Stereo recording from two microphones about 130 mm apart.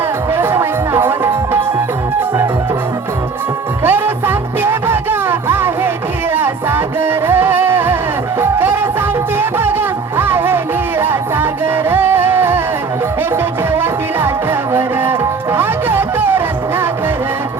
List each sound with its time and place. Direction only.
0.3 s music: 20° right (ahead or behind)
3.8 s music: 15° right (ahead or behind)